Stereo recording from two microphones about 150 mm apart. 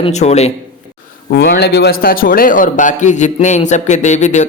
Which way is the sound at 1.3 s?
90° left.